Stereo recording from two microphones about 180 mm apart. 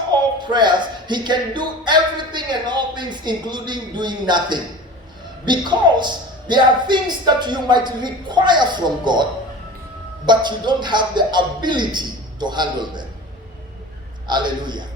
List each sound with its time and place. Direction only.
0.1 s music: 25° right (ahead or behind)
5.5 s a man's voice: 25° right (ahead or behind)
10.2 s a man's voice: 25° right (ahead or behind)
14.3 s a man's voice: 25° right (ahead or behind)